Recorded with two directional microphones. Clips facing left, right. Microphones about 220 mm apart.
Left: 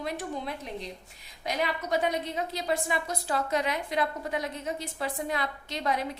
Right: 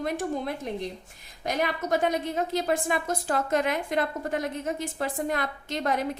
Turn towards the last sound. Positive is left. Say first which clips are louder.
# right 3 dB
turn(degrees=-50)  # may be behind; listen again after turning